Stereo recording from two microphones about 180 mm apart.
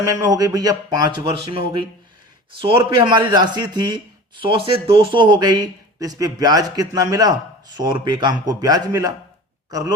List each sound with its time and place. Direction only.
0.0 s speech: 20° right (ahead or behind)